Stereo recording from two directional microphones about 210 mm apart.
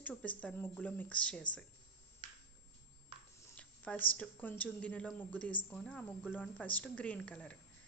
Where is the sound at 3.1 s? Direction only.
25° right (ahead or behind).